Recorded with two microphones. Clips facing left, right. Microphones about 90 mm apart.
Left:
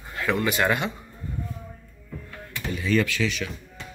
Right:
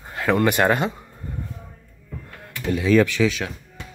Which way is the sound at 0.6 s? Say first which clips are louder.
Right 4 dB; 35° right (ahead or behind).